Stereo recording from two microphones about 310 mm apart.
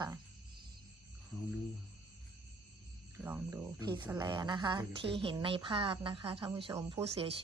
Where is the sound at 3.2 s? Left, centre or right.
Centre.